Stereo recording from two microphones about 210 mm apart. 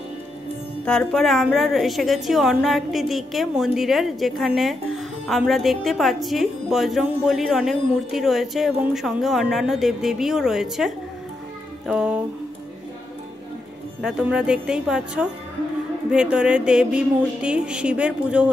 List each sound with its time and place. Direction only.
0.8 s a woman's voice: centre (ahead or behind)
14.0 s a woman's voice: 5° right (ahead or behind)